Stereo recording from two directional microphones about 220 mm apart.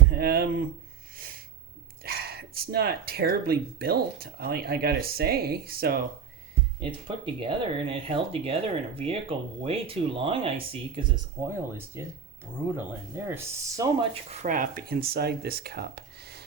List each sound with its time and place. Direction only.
0.1 s speech: 45° right (ahead or behind)
2.0 s speech: 45° right (ahead or behind)
7.3 s speech: 25° right (ahead or behind)
11.4 s speech: 10° right (ahead or behind); by 16.4 s 45° right (ahead or behind)